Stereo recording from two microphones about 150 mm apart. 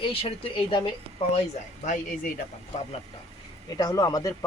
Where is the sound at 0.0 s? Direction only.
35° left (ahead or behind).